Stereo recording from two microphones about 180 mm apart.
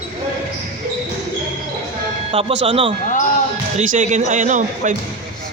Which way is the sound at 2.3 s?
35° right (ahead or behind).